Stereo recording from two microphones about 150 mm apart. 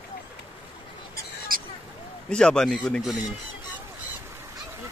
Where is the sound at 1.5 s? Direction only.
70° right (ahead or behind).